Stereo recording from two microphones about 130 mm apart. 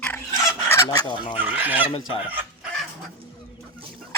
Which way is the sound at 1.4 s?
15° right (ahead or behind).